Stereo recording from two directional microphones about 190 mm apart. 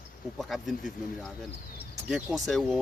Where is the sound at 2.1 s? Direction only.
Centre (ahead or behind).